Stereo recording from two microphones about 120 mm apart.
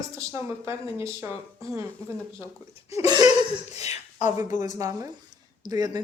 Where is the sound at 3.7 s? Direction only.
65° left (ahead or behind).